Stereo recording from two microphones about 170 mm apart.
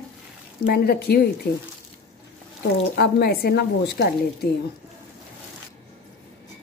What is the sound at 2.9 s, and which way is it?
A woman's voice, 70° left (ahead or behind).